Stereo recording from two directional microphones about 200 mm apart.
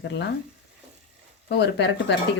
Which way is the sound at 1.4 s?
60° left (ahead or behind).